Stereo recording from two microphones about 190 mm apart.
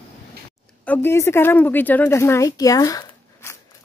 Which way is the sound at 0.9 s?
10° left (ahead or behind).